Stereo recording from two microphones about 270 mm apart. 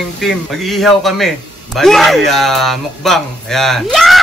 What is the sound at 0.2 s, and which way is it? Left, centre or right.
A man's voice, centre.